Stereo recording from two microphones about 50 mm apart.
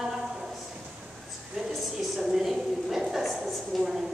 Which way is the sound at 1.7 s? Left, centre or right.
Centre.